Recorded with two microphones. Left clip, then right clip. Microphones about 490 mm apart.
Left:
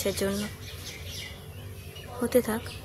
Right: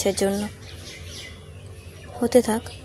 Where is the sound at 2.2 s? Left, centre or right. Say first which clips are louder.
Right 6 dB; left.